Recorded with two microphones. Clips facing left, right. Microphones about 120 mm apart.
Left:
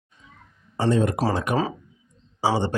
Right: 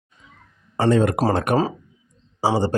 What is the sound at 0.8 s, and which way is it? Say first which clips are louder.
Speech: right 4 dB; 65° right (ahead or behind).